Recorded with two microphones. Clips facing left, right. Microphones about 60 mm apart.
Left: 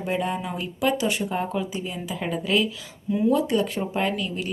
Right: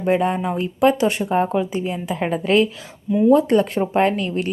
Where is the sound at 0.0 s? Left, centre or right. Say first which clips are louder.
Right 7 dB; right.